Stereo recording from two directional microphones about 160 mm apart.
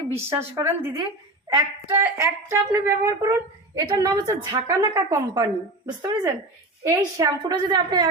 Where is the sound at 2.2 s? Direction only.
20° right (ahead or behind).